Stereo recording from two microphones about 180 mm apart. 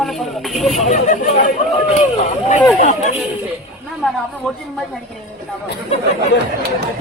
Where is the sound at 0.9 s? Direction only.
45° left (ahead or behind).